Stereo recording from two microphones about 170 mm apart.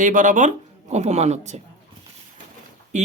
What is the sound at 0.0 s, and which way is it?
Speech, 50° right (ahead or behind).